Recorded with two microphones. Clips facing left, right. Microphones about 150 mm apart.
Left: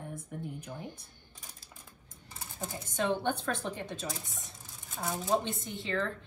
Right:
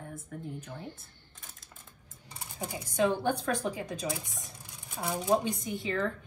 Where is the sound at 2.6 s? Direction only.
Centre (ahead or behind).